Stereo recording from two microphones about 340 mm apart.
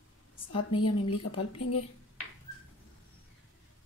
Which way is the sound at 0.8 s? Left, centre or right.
Centre.